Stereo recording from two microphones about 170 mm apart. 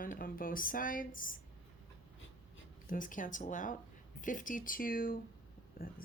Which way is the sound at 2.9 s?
50° left (ahead or behind).